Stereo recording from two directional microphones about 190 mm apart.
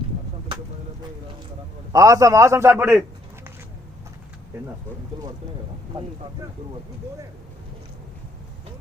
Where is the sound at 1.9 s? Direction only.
15° right (ahead or behind).